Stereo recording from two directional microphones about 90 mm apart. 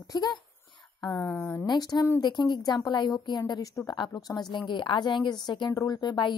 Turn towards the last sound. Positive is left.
turn(degrees=55)  # may be behind; listen again after turning